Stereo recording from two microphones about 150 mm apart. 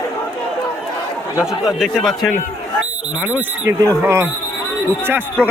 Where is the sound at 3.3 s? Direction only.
20° right (ahead or behind).